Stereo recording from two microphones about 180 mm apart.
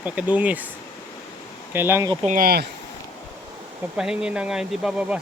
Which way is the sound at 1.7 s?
15° right (ahead or behind).